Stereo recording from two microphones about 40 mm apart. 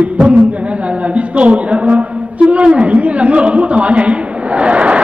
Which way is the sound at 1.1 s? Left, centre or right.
Right.